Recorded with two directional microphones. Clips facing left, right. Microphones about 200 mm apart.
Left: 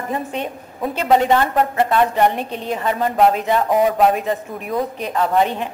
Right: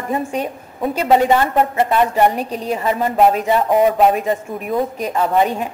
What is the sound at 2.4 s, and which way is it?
Speech, 35° right (ahead or behind).